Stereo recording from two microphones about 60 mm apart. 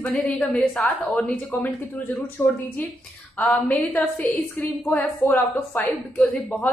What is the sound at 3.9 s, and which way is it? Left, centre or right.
A woman's voice, left.